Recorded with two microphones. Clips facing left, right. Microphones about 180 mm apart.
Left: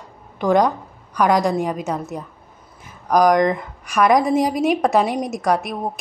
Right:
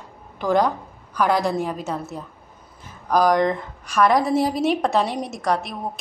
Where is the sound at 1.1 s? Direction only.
15° left (ahead or behind).